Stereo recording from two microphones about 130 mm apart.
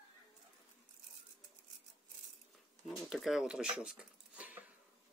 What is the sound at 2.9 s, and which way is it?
Speech, centre (ahead or behind).